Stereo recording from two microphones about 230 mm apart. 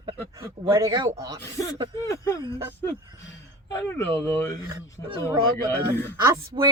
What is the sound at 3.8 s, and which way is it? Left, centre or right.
Speech, centre.